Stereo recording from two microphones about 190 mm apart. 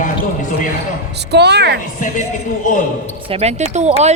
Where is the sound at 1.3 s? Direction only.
60° right (ahead or behind).